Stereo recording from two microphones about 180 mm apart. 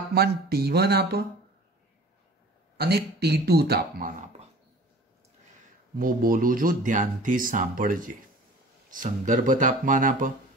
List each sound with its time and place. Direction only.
0.1 s speech: 60° right (ahead or behind)
2.8 s speech: 65° right (ahead or behind)
5.9 s speech: 50° right (ahead or behind)